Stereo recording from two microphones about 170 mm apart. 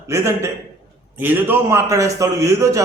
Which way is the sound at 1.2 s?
10° right (ahead or behind).